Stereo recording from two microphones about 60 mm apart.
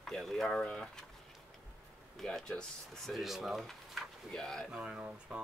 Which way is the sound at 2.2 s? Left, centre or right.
Centre.